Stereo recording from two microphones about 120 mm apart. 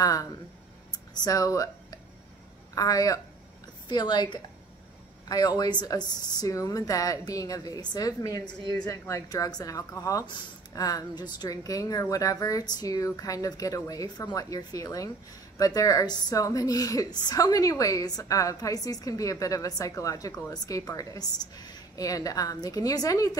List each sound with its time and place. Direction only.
0.0 s a woman's voice: 30° left (ahead or behind)